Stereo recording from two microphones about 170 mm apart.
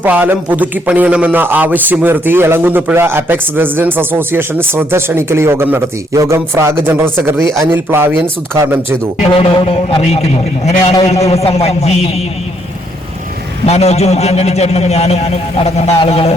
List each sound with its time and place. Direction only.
0.0 s a man's voice: 10° right (ahead or behind)
9.3 s a man's voice: 35° left (ahead or behind)
13.7 s a man's voice: 40° left (ahead or behind)